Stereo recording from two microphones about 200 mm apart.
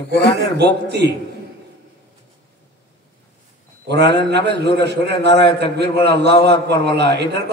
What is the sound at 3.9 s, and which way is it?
A man's voice, 55° right (ahead or behind).